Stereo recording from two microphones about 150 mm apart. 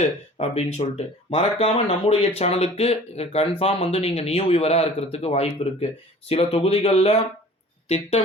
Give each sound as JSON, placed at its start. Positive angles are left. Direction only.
{"t": 0.0, "sound": "speech", "side_deg": 45}